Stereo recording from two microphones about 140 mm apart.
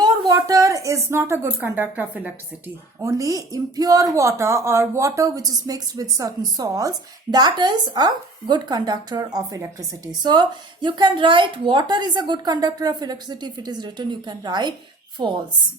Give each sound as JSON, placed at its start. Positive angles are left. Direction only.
{"t": 0.0, "sound": "speech", "side_deg": -25}
{"t": 3.0, "sound": "speech", "side_deg": -25}